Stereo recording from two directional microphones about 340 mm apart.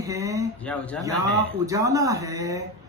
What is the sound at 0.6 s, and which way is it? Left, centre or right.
Speech, centre.